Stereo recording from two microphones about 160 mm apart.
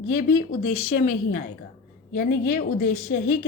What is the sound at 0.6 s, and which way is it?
Speech, 55° left (ahead or behind).